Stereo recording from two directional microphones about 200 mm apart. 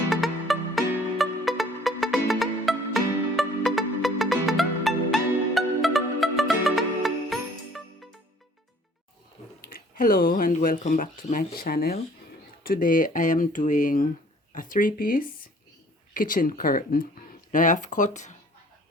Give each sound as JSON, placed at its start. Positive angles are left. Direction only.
{"t": 0.1, "sound": "music", "side_deg": 0}
{"t": 9.6, "sound": "speech", "side_deg": 45}